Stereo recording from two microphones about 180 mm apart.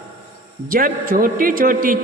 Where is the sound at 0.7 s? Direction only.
50° right (ahead or behind).